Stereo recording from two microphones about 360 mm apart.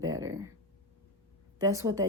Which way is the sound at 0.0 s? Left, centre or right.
Centre.